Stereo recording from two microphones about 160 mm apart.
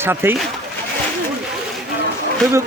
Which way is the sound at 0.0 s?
15° right (ahead or behind).